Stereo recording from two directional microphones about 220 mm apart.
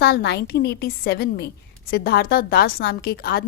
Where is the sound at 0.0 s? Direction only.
45° left (ahead or behind).